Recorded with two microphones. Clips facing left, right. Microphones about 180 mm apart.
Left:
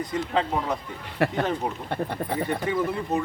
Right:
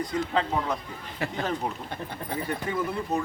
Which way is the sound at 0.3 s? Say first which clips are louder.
Left 2 dB; centre (ahead or behind).